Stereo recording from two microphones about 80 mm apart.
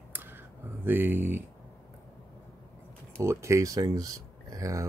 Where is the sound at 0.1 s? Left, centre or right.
Right.